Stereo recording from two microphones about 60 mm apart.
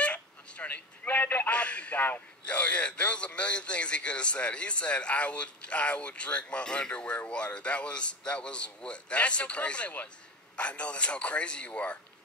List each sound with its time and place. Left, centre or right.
0.0 s a sound: left
1.0 s speech: left
1.5 s a man's voice: left